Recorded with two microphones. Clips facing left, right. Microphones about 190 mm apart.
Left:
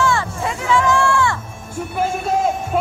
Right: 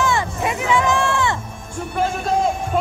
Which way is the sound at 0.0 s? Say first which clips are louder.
Left 1 dB; 20° right (ahead or behind).